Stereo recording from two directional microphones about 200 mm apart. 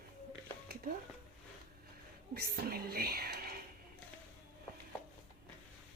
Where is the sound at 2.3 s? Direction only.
50° right (ahead or behind).